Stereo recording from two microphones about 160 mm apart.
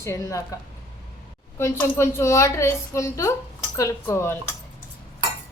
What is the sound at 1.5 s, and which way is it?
A woman's voice, 15° left (ahead or behind).